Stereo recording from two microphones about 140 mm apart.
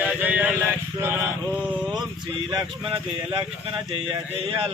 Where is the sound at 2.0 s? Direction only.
30° right (ahead or behind).